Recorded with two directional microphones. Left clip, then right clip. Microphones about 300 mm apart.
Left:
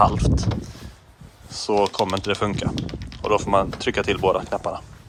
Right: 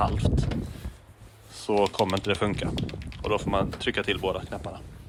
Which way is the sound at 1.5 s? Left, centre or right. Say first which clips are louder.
Left 4 dB; centre.